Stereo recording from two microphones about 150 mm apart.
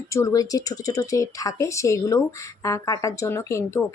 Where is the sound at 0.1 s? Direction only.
20° left (ahead or behind).